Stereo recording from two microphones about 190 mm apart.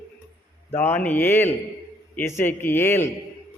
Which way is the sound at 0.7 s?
10° left (ahead or behind).